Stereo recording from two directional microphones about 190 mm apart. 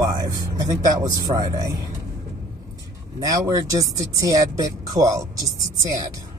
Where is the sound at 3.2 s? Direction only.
20° right (ahead or behind).